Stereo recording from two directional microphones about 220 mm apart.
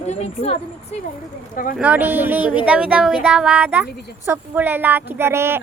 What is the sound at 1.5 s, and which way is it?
Speech, 40° left (ahead or behind).